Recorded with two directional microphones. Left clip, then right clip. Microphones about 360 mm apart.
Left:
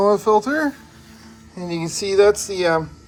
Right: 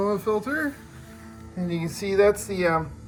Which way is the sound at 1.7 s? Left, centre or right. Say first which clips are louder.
Left 6 dB; centre.